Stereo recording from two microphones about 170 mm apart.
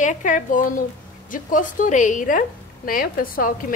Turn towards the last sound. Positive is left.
turn(degrees=55)  # may be behind; listen again after turning